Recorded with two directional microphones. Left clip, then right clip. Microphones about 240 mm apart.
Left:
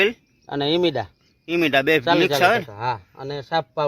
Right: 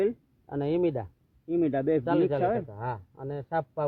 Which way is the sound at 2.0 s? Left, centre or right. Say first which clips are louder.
Left 9 dB; left.